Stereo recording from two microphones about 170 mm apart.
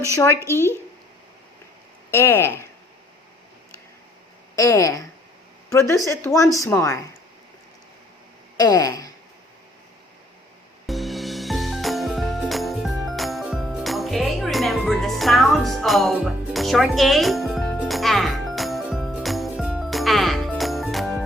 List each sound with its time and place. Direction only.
2.0 s speech: 15° left (ahead or behind)
4.5 s a woman's voice: 20° left (ahead or behind)
8.5 s a sound: 20° left (ahead or behind)
10.8 s music: centre (ahead or behind)